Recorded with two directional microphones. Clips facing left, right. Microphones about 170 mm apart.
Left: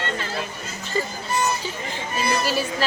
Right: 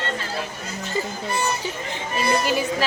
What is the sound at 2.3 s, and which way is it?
Speech, 20° right (ahead or behind).